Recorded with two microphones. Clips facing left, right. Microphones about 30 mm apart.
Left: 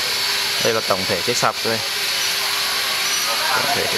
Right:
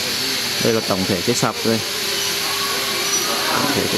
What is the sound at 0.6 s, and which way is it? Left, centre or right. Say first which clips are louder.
Speech: right 2 dB; left.